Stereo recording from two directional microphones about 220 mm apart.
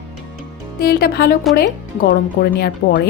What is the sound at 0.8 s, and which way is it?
A woman's voice, 45° left (ahead or behind).